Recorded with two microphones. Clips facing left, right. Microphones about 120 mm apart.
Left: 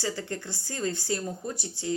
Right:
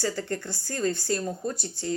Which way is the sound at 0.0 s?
20° left (ahead or behind).